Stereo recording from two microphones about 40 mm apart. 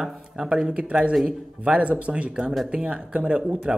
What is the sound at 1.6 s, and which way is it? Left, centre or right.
A woman's voice, right.